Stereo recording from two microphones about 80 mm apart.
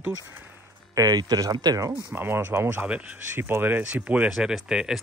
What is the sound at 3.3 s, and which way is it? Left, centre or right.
Speech, right.